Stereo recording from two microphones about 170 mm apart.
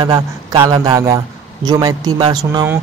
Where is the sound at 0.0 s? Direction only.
25° right (ahead or behind).